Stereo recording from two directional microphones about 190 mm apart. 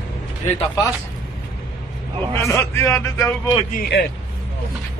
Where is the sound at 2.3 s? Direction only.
15° left (ahead or behind).